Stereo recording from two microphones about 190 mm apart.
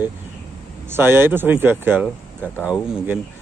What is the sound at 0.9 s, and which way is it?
Speech, 10° right (ahead or behind).